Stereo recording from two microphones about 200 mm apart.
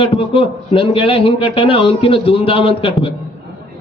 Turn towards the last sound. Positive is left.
turn(degrees=30)  # may be behind; listen again after turning